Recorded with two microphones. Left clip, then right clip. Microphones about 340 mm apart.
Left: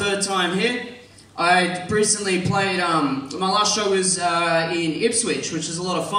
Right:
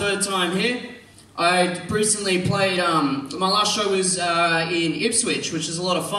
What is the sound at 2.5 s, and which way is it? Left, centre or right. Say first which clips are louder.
A man's voice: even; centre.